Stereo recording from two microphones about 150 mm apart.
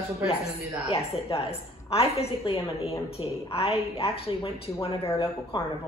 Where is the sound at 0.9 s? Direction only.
40° left (ahead or behind).